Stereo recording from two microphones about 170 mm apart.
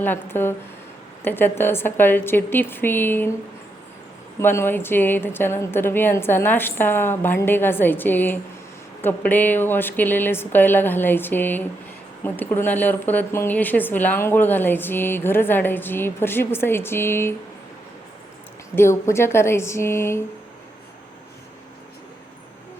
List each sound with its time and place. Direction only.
0.0 s speech: 10° left (ahead or behind)
4.4 s speech: 15° left (ahead or behind)
18.8 s speech: 15° left (ahead or behind)